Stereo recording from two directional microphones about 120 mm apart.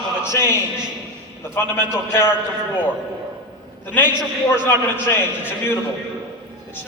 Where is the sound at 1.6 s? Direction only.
20° left (ahead or behind).